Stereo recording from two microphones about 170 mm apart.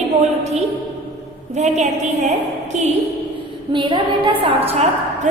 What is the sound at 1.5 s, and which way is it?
Speech, 45° right (ahead or behind).